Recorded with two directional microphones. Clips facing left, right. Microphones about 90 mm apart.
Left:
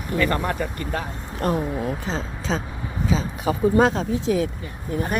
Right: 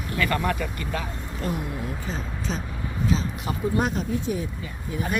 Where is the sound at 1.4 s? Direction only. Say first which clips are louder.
Left 7 dB; 60° left (ahead or behind).